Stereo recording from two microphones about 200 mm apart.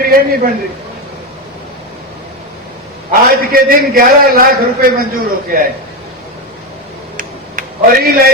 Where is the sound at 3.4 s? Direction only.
45° right (ahead or behind).